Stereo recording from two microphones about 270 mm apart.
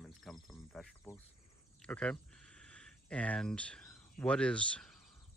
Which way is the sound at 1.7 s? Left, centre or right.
Centre.